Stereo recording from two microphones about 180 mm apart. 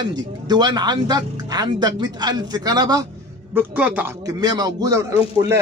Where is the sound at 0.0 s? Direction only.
25° right (ahead or behind).